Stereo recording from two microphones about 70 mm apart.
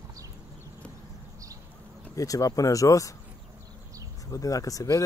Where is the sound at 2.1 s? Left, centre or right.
Left.